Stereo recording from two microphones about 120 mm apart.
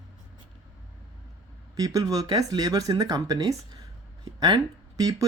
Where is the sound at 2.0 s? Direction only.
30° right (ahead or behind).